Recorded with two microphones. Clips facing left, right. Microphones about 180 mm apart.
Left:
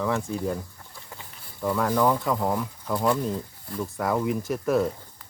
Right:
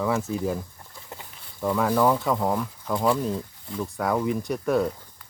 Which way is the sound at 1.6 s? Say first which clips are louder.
Right 1 dB; 5° right (ahead or behind).